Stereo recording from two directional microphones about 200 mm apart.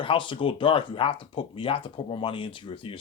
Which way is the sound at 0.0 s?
25° left (ahead or behind).